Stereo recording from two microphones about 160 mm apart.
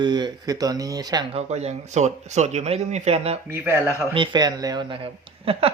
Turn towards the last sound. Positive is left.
turn(degrees=-35)  # may be behind; listen again after turning